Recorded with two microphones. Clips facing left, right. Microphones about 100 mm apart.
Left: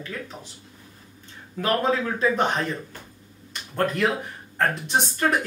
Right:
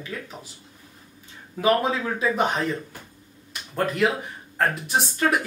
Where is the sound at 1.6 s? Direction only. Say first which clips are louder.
Right 1 dB; 5° right (ahead or behind).